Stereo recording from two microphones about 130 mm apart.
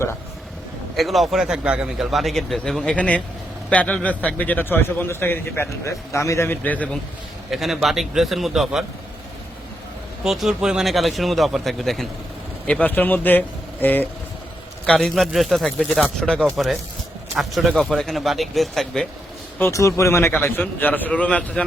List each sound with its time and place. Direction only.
0.9 s a man's voice: centre (ahead or behind)
7.5 s speech: centre (ahead or behind)
10.2 s speech: centre (ahead or behind); by 14.1 s 15° left (ahead or behind)
14.8 s speech: centre (ahead or behind)
19.5 s a man's voice: 20° left (ahead or behind)